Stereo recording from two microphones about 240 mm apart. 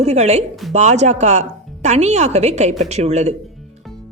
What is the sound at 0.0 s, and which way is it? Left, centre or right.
A woman's voice, right.